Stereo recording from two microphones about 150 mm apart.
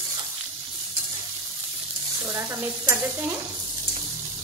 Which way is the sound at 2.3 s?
15° right (ahead or behind).